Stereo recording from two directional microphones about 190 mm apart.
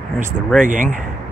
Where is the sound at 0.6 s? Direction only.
45° right (ahead or behind).